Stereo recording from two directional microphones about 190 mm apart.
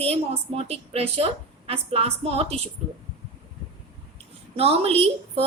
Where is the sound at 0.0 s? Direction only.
30° right (ahead or behind).